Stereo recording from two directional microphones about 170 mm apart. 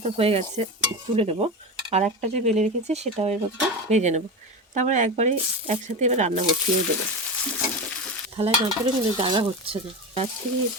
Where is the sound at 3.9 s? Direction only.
45° right (ahead or behind).